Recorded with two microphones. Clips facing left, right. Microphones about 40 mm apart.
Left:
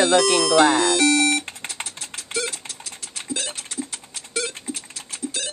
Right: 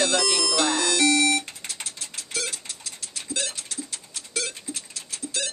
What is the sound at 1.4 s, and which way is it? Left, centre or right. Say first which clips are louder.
Typing: left 3 dB; left.